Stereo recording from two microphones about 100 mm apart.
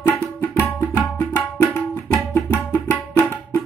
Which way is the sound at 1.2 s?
25° left (ahead or behind).